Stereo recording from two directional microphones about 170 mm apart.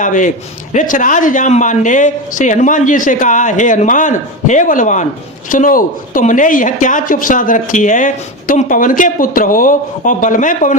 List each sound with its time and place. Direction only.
0.0 s speech: 50° left (ahead or behind)